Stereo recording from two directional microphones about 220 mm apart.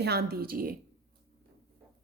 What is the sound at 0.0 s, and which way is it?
Speech, 45° right (ahead or behind).